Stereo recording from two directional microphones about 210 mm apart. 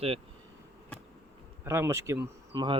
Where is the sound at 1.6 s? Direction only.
10° right (ahead or behind).